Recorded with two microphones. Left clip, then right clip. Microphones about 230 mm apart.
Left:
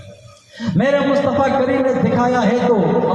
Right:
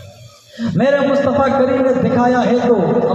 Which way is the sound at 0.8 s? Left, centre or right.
Right.